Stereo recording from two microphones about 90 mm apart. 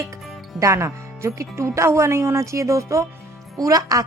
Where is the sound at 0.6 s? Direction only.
35° right (ahead or behind).